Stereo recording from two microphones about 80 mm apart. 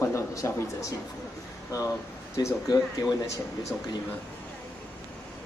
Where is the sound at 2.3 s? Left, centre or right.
Left.